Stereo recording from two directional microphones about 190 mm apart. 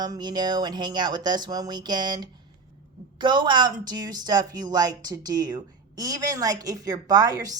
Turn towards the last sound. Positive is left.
turn(degrees=-20)  # may be behind; listen again after turning